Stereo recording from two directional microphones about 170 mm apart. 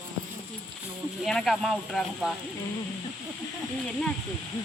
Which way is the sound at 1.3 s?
5° left (ahead or behind).